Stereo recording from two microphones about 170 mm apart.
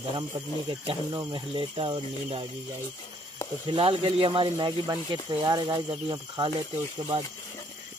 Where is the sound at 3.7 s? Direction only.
30° right (ahead or behind).